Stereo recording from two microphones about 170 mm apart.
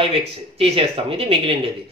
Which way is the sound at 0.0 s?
35° right (ahead or behind).